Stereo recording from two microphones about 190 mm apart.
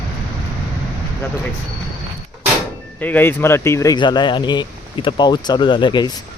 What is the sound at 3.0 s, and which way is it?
Speech, 10° left (ahead or behind).